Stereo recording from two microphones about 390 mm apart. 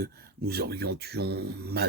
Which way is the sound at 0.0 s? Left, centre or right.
Right.